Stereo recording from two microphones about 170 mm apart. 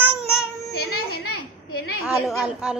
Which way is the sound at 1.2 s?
65° left (ahead or behind).